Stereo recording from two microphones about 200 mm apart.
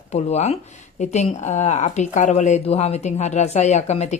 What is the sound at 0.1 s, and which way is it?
Speech, 30° left (ahead or behind).